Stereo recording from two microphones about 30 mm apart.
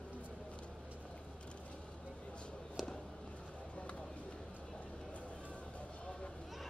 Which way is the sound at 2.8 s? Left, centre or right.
Centre.